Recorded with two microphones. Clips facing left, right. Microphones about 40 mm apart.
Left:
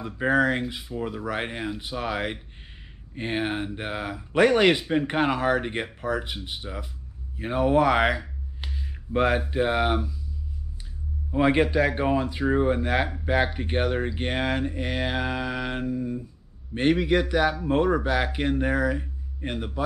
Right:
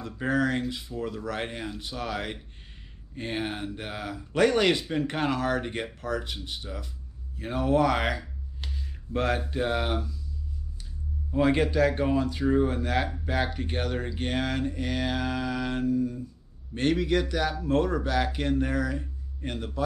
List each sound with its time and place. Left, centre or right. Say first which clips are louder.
0.0 s speech: left 4 dB; left
11.2 s speech: left 3 dB; left